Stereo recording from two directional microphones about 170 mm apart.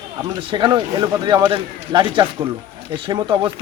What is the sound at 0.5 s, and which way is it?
A man's voice, 25° right (ahead or behind).